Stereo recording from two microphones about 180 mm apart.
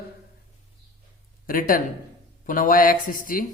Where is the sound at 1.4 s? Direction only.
50° left (ahead or behind).